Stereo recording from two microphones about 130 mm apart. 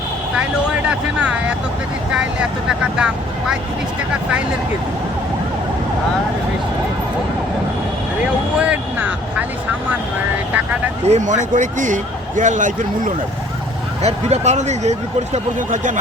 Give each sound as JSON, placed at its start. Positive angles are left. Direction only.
{"t": 0.9, "sound": "speech", "side_deg": -10}
{"t": 2.6, "sound": "speech", "side_deg": -5}
{"t": 8.5, "sound": "speech", "side_deg": -10}
{"t": 11.1, "sound": "a man's voice", "side_deg": -70}
{"t": 14.0, "sound": "speech", "side_deg": -55}